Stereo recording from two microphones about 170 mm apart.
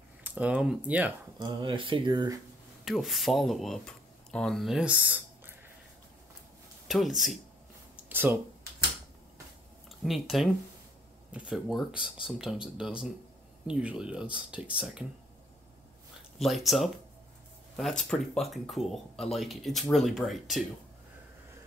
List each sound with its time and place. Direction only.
0.2 s speech: 10° right (ahead or behind)
1.4 s speech: 30° right (ahead or behind)
2.8 s speech: centre (ahead or behind)
7.9 s a sound: 10° right (ahead or behind)
9.8 s speech: centre (ahead or behind)
16.3 s speech: centre (ahead or behind)